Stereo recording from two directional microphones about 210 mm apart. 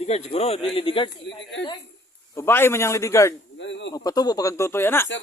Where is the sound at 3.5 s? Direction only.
60° left (ahead or behind).